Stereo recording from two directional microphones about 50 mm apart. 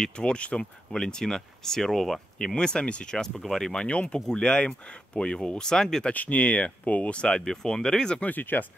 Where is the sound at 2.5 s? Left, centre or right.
Centre.